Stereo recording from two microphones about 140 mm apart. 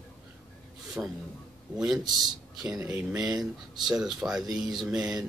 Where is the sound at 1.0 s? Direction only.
10° right (ahead or behind).